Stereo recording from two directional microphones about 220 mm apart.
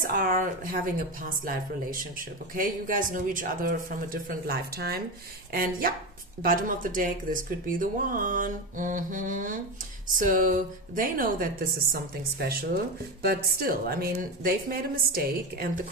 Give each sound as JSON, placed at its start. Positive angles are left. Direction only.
{"t": 0.0, "sound": "speech", "side_deg": -40}